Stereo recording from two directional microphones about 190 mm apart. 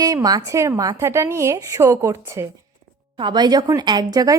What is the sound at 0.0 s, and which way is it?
Speech, 20° right (ahead or behind).